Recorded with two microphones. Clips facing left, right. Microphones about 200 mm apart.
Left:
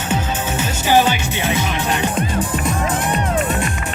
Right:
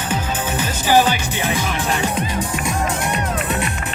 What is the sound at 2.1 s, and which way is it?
Speech, 50° left (ahead or behind).